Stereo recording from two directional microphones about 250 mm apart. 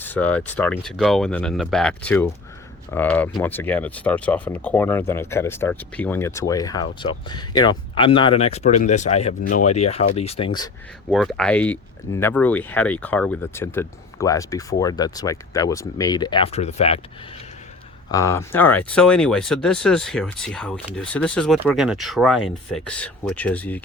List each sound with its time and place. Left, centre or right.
0.0 s speech: centre
11.1 s speech: centre; by 17.0 s left
18.1 s speech: centre